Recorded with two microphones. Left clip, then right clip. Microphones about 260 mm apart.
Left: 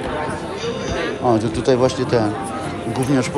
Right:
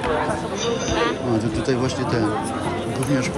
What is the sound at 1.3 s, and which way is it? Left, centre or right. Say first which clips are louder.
Speech: left 5 dB; centre.